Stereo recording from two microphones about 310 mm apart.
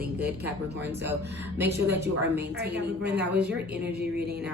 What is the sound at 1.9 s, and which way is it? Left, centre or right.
A woman's voice, right.